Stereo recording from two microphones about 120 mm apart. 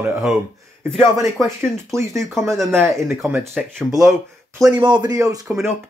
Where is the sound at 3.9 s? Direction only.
30° right (ahead or behind).